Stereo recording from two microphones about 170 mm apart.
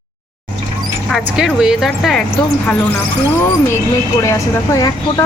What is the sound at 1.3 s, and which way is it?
Speech, 5° right (ahead or behind).